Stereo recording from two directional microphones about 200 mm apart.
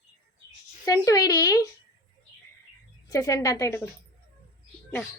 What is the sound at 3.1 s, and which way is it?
Speech, 15° left (ahead or behind).